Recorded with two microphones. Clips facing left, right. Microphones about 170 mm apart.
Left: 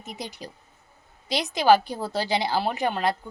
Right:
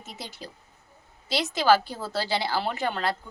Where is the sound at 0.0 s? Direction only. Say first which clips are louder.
Left 4 dB; 15° left (ahead or behind).